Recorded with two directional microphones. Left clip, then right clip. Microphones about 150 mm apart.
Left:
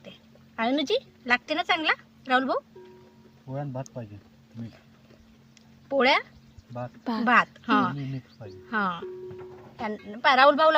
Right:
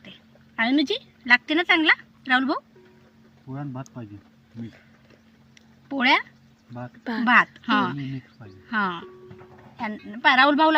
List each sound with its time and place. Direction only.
0.5 s a woman's voice: 25° left (ahead or behind)
5.9 s speech: 30° left (ahead or behind)
7.0 s speech: 15° left (ahead or behind)
7.6 s a woman's voice: 30° left (ahead or behind)